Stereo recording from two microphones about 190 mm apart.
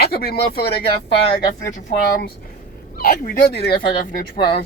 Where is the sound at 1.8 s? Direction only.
40° left (ahead or behind).